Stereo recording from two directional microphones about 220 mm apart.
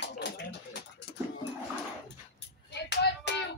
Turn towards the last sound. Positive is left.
turn(degrees=50)  # may be behind; listen again after turning